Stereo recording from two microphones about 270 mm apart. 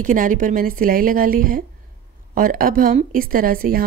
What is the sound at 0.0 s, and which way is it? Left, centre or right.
Speech, right.